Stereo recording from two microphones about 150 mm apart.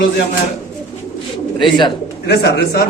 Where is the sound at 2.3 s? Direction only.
90° left.